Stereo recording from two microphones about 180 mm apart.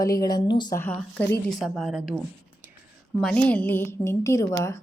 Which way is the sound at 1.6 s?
Centre (ahead or behind).